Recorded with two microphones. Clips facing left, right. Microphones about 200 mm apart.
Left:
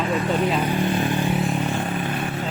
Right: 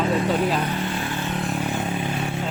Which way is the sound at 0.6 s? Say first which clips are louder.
Left 5 dB; 15° left (ahead or behind).